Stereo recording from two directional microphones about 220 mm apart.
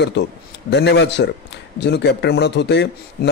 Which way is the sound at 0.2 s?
50° left (ahead or behind).